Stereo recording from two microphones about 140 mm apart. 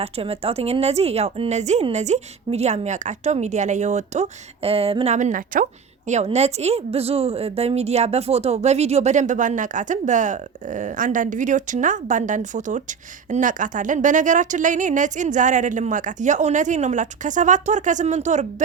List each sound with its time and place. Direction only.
0.0 s speech: 45° right (ahead or behind); by 5.6 s 75° right (ahead or behind)
6.1 s a woman's voice: 50° right (ahead or behind)